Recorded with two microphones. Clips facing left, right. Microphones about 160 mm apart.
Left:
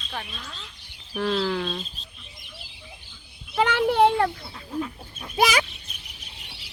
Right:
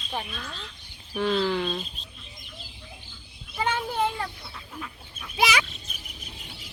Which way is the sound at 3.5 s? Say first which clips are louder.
Left 7 dB; 75° left (ahead or behind).